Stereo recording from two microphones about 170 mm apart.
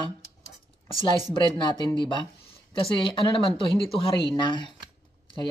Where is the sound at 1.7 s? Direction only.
30° left (ahead or behind).